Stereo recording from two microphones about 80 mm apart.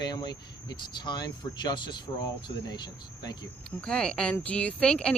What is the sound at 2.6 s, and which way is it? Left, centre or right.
Speech, left.